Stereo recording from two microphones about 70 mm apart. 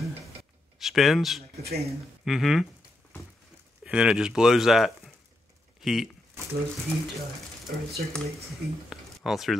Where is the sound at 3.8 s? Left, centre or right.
Centre.